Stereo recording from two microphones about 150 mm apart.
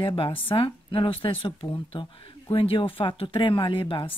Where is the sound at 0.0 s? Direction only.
35° left (ahead or behind).